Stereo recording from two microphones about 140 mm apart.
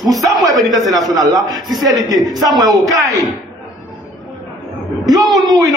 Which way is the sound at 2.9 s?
25° right (ahead or behind).